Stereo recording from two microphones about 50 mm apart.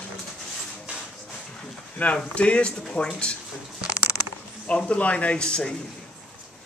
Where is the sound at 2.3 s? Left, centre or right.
Left.